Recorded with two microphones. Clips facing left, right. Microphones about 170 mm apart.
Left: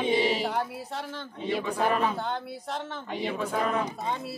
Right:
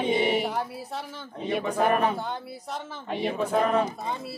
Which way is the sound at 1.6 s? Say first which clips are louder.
Right 4 dB; 45° right (ahead or behind).